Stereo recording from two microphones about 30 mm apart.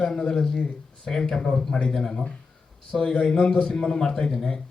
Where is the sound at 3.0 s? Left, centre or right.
Left.